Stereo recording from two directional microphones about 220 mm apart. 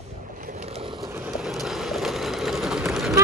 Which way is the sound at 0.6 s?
25° right (ahead or behind).